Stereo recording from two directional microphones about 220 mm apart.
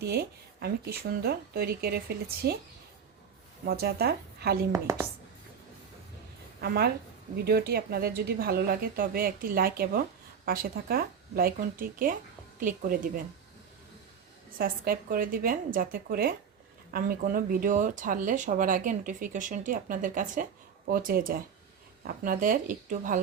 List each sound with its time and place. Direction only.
0.0 s speech: 45° right (ahead or behind)
3.7 s speech: 45° right (ahead or behind)
4.7 s speech: 15° right (ahead or behind)
6.6 s speech: 45° right (ahead or behind)
14.6 s speech: 40° right (ahead or behind)